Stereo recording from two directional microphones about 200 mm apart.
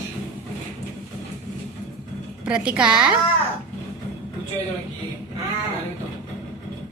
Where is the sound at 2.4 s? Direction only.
5° right (ahead or behind).